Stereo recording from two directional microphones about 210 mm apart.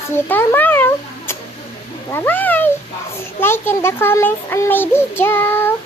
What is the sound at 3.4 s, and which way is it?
A child's voice, 10° left (ahead or behind).